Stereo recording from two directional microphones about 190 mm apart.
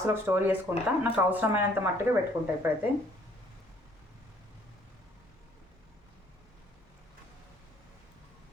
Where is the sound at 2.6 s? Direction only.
10° right (ahead or behind).